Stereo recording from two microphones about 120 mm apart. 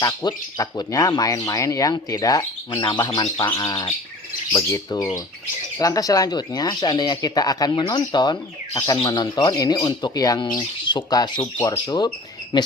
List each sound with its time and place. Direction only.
0.0 s speech: 35° left (ahead or behind)